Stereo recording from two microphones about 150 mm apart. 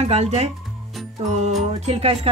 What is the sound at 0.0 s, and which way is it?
Speech, 45° right (ahead or behind).